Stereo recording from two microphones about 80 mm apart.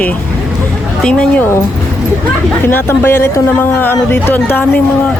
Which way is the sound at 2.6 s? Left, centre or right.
Left.